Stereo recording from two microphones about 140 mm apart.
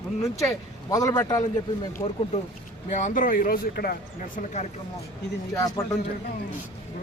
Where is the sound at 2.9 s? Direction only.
65° left (ahead or behind); by 4.4 s 90° left.